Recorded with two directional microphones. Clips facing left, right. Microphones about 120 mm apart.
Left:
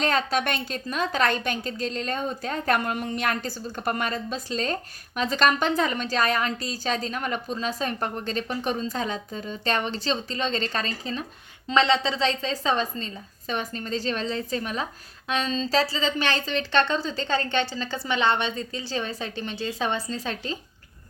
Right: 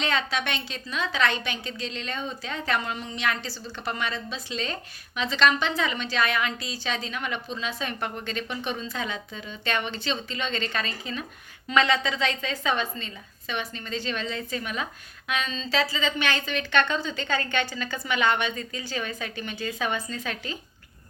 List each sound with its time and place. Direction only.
0.0 s a woman's voice: 45° left (ahead or behind)